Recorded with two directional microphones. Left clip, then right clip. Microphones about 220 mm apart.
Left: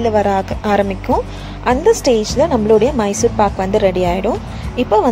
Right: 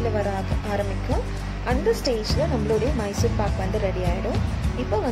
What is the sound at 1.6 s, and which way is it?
A woman's voice, 35° left (ahead or behind).